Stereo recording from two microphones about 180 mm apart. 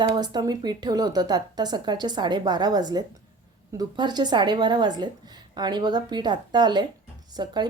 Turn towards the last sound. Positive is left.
turn(degrees=-25)  # may be behind; listen again after turning